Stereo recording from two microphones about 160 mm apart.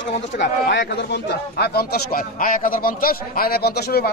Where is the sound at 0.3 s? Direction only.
70° left (ahead or behind).